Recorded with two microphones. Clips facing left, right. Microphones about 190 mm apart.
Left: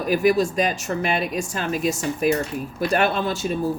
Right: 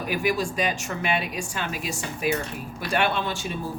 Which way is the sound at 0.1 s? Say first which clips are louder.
Left 7 dB; 40° left (ahead or behind).